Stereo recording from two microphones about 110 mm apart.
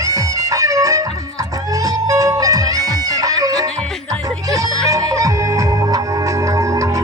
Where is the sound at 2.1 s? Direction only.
30° right (ahead or behind).